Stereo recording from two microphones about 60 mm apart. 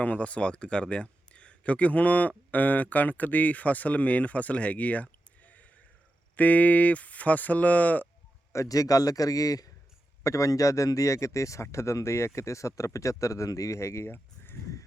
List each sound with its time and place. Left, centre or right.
0.0 s speech: left
8.5 s a man's voice: left
10.2 s speech: left